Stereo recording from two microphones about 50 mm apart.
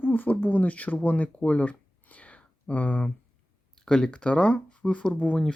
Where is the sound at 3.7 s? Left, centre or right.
Centre.